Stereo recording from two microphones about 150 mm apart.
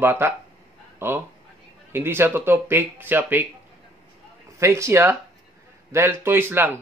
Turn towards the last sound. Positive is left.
turn(degrees=-15)  # may be behind; listen again after turning